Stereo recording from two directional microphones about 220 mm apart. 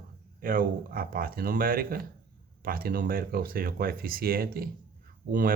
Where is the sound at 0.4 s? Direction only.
40° right (ahead or behind).